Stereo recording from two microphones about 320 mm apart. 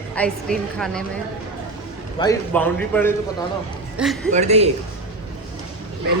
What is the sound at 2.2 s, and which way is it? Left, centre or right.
A child's voice, centre.